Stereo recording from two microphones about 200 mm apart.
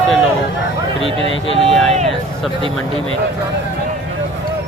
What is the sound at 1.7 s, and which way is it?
Speech, centre (ahead or behind).